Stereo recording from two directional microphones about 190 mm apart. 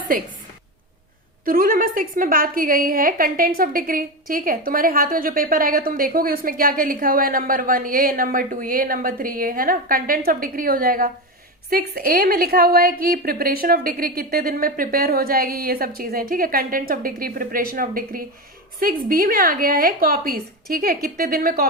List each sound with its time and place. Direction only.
1.5 s a woman's voice: 50° right (ahead or behind)